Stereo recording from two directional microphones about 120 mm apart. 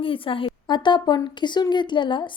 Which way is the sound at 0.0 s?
45° left (ahead or behind).